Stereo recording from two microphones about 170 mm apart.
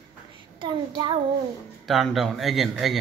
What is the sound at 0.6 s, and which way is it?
Speech, 25° right (ahead or behind).